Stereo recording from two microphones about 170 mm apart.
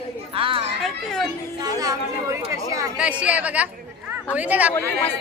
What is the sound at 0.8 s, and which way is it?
Speech, 5° left (ahead or behind).